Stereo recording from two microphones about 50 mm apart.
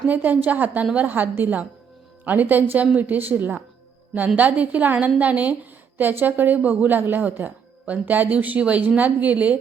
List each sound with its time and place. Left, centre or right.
0.1 s a woman's voice: right